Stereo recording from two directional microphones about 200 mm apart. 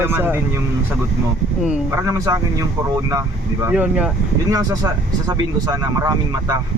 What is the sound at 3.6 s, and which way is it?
Speech, 5° right (ahead or behind).